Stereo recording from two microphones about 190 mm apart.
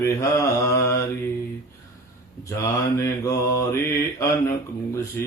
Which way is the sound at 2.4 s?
15° left (ahead or behind).